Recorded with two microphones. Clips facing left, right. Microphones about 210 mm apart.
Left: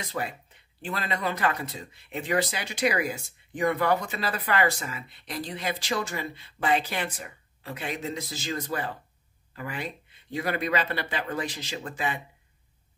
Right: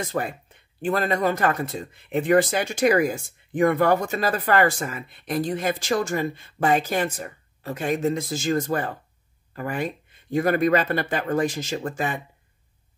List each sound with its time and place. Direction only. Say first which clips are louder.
0.0 s speech: right 6 dB; 50° right (ahead or behind)